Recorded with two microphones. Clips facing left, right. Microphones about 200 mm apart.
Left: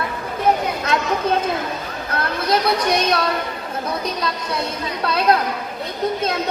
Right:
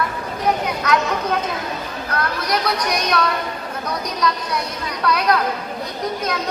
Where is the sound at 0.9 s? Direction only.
25° left (ahead or behind).